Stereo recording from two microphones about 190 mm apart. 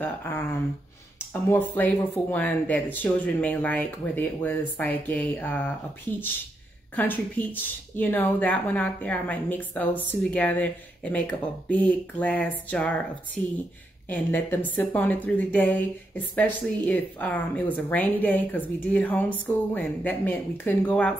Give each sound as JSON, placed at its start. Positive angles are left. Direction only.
{"t": 0.0, "sound": "speech", "side_deg": 10}
{"t": 7.0, "sound": "speech", "side_deg": 10}